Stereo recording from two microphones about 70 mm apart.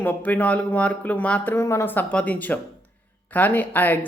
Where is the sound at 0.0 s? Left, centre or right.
Left.